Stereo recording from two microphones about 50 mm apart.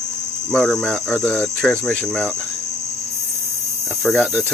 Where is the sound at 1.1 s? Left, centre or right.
Left.